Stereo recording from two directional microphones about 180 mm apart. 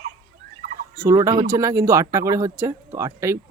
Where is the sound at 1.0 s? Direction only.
20° right (ahead or behind).